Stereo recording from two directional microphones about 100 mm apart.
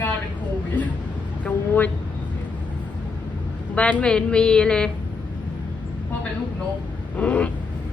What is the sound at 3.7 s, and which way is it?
A woman's voice, 10° left (ahead or behind).